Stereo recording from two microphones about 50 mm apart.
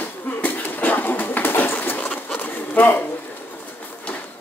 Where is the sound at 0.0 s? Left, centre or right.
Left.